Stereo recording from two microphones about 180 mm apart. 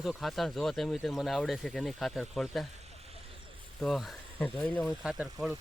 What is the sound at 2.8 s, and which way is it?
Vehicle, 35° right (ahead or behind).